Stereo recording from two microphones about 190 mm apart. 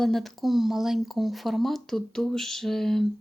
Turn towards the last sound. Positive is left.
turn(degrees=0)  # may be behind; listen again after turning